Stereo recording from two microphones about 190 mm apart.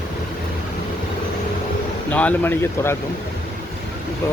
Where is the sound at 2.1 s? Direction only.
5° left (ahead or behind).